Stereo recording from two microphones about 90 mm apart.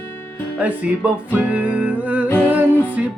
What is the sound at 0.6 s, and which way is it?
Music, 15° right (ahead or behind).